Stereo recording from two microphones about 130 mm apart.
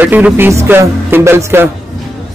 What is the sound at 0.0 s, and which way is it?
Speech, 15° right (ahead or behind).